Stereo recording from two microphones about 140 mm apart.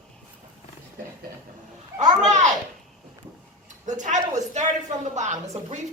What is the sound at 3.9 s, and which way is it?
A woman's voice, 60° right (ahead or behind).